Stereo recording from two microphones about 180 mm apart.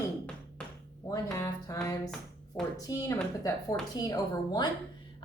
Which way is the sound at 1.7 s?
20° left (ahead or behind).